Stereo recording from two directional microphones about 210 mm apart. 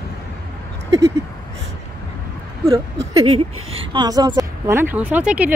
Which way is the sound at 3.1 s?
25° right (ahead or behind).